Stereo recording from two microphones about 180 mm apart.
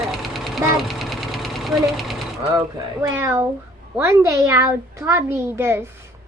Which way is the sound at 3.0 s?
10° right (ahead or behind).